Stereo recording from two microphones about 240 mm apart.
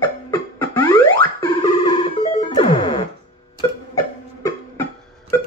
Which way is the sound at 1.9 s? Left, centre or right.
Left.